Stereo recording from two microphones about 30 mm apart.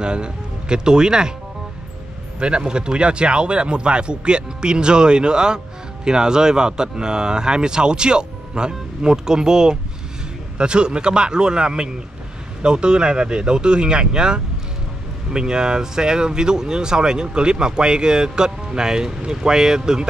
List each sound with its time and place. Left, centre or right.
0.0 s speech: right
2.6 s speech: right